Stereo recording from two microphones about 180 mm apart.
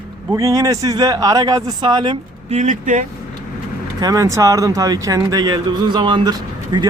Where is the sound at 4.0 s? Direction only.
20° right (ahead or behind).